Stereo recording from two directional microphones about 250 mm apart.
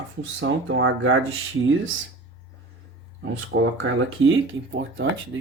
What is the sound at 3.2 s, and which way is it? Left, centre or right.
Speech, right.